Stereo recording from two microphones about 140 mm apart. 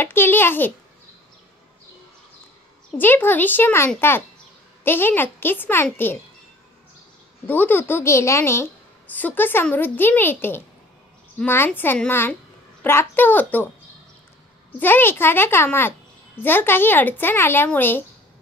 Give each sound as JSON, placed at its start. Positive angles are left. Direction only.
{"t": 0.0, "sound": "a woman's voice", "side_deg": 15}
{"t": 3.0, "sound": "a woman's voice", "side_deg": 15}
{"t": 7.4, "sound": "a woman's voice", "side_deg": 15}
{"t": 14.8, "sound": "a woman's voice", "side_deg": 15}